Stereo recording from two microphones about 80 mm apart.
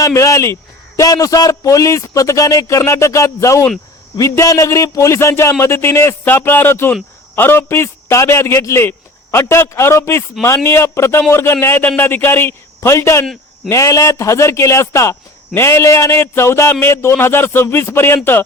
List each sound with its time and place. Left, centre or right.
0.0 s a man's voice: left